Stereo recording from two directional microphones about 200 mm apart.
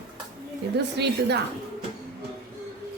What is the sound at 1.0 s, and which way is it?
Speech, 55° right (ahead or behind).